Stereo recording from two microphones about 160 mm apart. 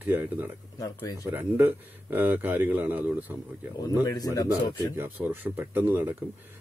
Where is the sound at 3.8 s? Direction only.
20° left (ahead or behind).